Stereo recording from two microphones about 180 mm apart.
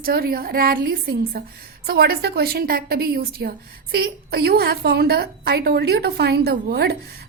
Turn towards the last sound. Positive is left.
turn(degrees=-60)  # may be behind; listen again after turning